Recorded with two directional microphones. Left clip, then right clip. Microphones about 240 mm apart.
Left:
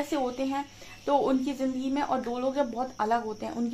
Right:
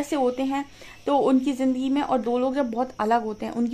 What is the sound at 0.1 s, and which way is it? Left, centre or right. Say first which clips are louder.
Speech: right 5 dB; right.